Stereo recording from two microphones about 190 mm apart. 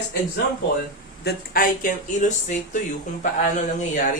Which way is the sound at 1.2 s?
45° left (ahead or behind).